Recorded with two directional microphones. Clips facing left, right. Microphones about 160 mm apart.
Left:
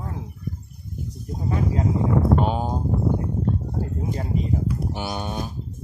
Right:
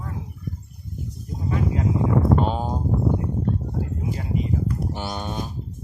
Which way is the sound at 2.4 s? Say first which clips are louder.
Left 1 dB; 5° left (ahead or behind).